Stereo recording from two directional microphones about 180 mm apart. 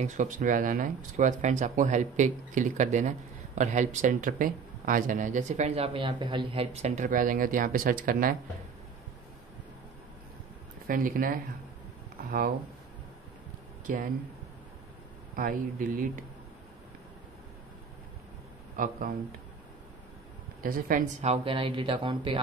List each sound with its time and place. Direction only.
0.0 s speech: 45° right (ahead or behind)
5.9 s speech: 25° right (ahead or behind); by 8.4 s 50° right (ahead or behind)
10.9 s speech: 50° right (ahead or behind)
15.3 s speech: 50° right (ahead or behind)
18.8 s speech: 50° right (ahead or behind)
20.6 s speech: 50° right (ahead or behind); by 22.4 s 30° right (ahead or behind)